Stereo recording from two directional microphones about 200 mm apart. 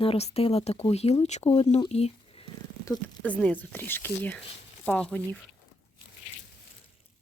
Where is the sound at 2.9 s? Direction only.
5° left (ahead or behind).